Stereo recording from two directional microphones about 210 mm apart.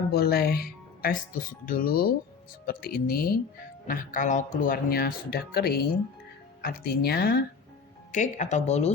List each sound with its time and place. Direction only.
0.1 s speech: 50° left (ahead or behind)
8.1 s speech: 35° left (ahead or behind)